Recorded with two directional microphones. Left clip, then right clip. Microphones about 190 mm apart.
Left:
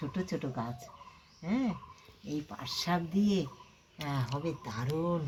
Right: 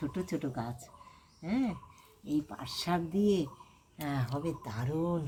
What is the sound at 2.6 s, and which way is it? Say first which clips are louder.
A woman's voice: even; 10° left (ahead or behind).